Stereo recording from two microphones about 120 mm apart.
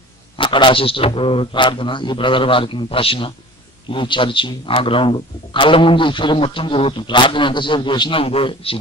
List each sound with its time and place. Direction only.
0.3 s a man's voice: 45° left (ahead or behind)